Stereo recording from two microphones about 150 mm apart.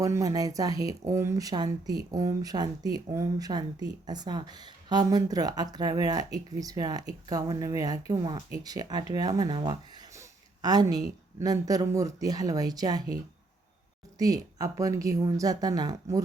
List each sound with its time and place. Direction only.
0.0 s a woman's voice: 20° right (ahead or behind)
14.2 s speech: 25° right (ahead or behind)